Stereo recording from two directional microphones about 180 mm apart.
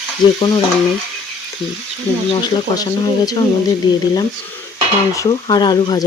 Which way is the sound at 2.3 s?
25° left (ahead or behind).